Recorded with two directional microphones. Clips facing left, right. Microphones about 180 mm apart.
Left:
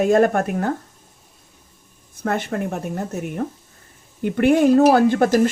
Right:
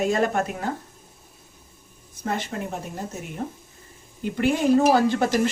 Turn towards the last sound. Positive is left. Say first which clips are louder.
# left 5 dB
turn(degrees=50)  # may be behind; listen again after turning